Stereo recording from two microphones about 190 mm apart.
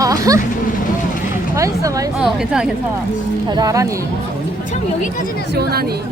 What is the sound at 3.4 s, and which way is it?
Speech, 20° right (ahead or behind).